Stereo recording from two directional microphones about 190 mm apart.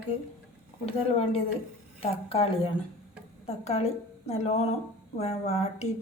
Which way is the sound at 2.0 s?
30° left (ahead or behind).